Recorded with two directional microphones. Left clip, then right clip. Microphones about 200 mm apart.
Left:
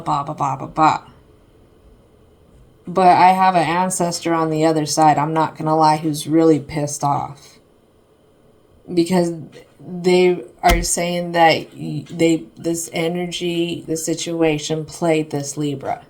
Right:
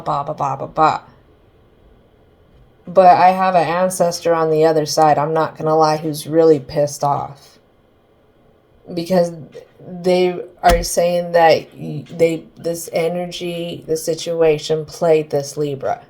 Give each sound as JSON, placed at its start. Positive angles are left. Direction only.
{"t": 0.0, "sound": "speech", "side_deg": -20}
{"t": 2.9, "sound": "speech", "side_deg": -25}
{"t": 9.0, "sound": "speech", "side_deg": -25}